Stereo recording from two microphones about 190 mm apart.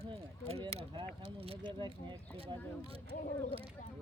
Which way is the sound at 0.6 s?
30° right (ahead or behind).